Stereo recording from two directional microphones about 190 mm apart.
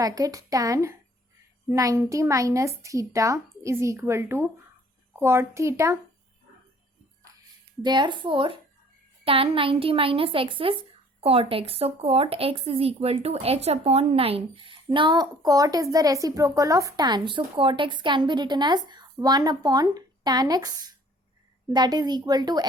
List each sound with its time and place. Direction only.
0.0 s a woman's voice: 20° right (ahead or behind)
7.8 s speech: 25° right (ahead or behind)